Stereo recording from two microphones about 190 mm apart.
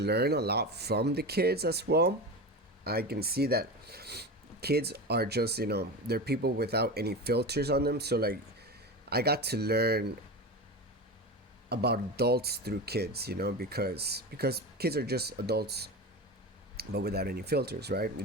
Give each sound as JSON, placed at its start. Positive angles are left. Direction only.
{"t": 0.0, "sound": "speech", "side_deg": -60}
{"t": 11.7, "sound": "speech", "side_deg": -60}